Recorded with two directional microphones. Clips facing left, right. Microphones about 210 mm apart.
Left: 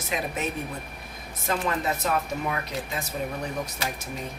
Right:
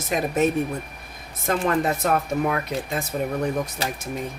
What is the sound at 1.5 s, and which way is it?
Speech, 55° right (ahead or behind).